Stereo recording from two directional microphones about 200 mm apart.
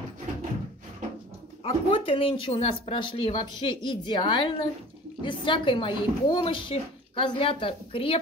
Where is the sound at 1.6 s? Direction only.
30° left (ahead or behind).